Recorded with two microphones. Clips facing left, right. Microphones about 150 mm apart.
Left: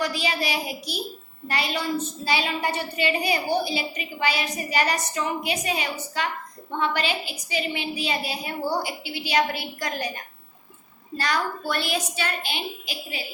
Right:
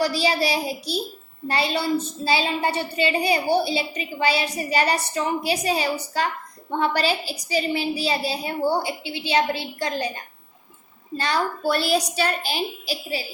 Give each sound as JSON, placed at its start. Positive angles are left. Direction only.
{"t": 0.0, "sound": "a woman's voice", "side_deg": -35}
{"t": 11.2, "sound": "a woman's voice", "side_deg": -30}